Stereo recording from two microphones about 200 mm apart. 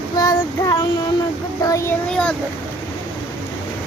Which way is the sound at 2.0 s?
5° left (ahead or behind).